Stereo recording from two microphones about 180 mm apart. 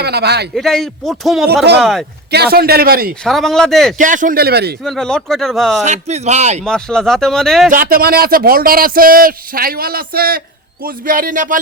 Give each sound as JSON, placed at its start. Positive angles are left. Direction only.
{"t": 0.0, "sound": "speech", "side_deg": -65}
{"t": 0.5, "sound": "speech", "side_deg": 0}
{"t": 2.3, "sound": "speech", "side_deg": -60}
{"t": 3.2, "sound": "speech", "side_deg": 0}
{"t": 3.9, "sound": "speech", "side_deg": -45}
{"t": 4.8, "sound": "speech", "side_deg": 5}
{"t": 5.8, "sound": "speech", "side_deg": -40}
{"t": 6.7, "sound": "speech", "side_deg": 5}
{"t": 7.7, "sound": "speech", "side_deg": -55}